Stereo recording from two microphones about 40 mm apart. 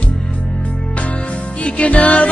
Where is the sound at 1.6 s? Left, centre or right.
Left.